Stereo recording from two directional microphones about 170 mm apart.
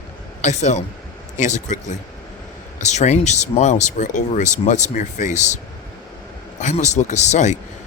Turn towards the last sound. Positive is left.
turn(degrees=45)  # may be behind; listen again after turning